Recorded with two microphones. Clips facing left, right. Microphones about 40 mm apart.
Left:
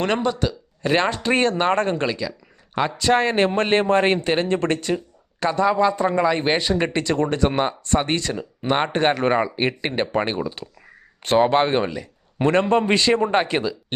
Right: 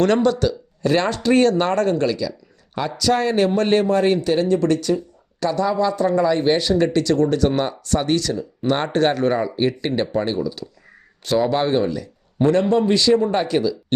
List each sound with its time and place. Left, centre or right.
0.0 s a man's voice: centre; by 13.7 s left